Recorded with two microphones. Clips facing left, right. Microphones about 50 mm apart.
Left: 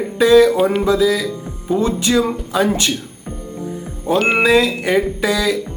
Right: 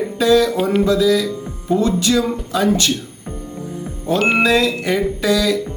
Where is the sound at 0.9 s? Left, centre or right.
Centre.